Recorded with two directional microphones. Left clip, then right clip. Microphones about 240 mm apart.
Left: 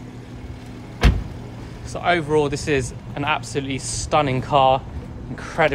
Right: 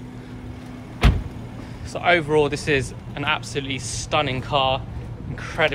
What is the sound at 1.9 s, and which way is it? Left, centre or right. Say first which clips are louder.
A man's voice: right 1 dB; centre.